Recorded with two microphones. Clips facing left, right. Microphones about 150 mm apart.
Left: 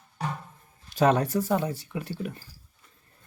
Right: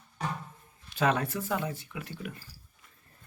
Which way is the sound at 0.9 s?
40° left (ahead or behind).